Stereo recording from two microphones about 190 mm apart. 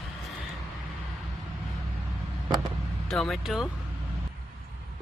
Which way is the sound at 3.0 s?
Centre (ahead or behind).